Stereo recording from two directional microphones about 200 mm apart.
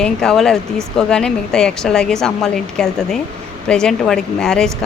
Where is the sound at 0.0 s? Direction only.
5° left (ahead or behind).